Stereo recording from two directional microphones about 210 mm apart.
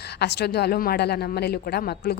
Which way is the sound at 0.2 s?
50° left (ahead or behind).